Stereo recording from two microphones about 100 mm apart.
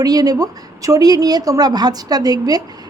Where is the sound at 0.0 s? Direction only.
40° right (ahead or behind).